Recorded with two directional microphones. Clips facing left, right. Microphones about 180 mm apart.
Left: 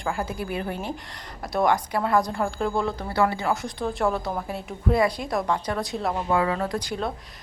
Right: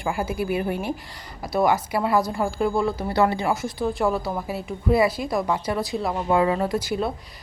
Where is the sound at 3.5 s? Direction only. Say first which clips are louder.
Right 2 dB; 5° right (ahead or behind).